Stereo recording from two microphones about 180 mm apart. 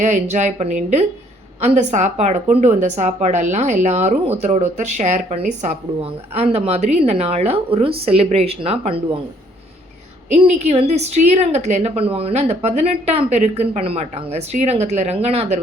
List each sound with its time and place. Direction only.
0.0 s speech: 40° right (ahead or behind)
10.2 s speech: 35° right (ahead or behind)